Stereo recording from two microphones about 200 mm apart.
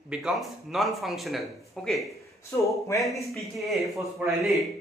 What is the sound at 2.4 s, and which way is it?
Speech, 15° left (ahead or behind).